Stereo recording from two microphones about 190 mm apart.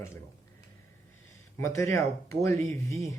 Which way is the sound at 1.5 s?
15° left (ahead or behind).